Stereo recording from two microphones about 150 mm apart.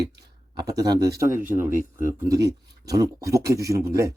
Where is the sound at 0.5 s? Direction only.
25° right (ahead or behind).